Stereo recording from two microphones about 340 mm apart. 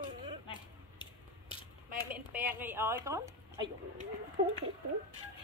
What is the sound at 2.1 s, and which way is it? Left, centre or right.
A woman's voice, centre.